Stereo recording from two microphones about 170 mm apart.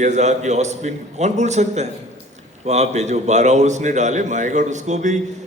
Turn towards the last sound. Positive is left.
turn(degrees=-45)  # may be behind; listen again after turning